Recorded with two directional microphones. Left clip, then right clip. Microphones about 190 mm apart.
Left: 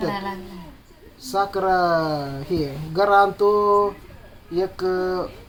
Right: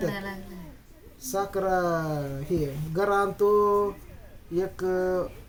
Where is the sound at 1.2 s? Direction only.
10° right (ahead or behind).